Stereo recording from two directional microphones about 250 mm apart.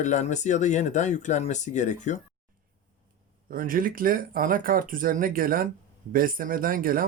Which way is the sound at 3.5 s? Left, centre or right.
Right.